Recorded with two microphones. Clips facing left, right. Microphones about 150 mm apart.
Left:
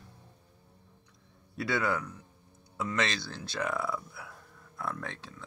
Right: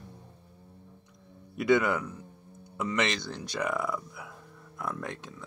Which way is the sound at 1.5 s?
20° right (ahead or behind).